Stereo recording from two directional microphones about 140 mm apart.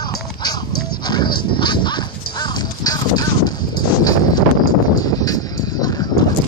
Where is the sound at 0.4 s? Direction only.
30° left (ahead or behind).